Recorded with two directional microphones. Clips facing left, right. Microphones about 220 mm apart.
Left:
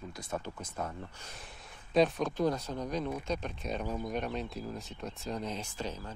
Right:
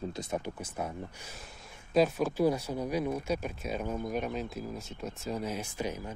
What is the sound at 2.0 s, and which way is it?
Speech, 5° right (ahead or behind).